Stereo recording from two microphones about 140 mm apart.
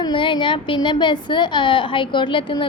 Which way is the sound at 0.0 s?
35° left (ahead or behind).